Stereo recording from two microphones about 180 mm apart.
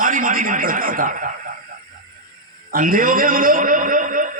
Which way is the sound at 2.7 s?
50° right (ahead or behind).